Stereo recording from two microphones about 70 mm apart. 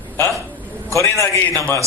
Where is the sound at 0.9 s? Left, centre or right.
Left.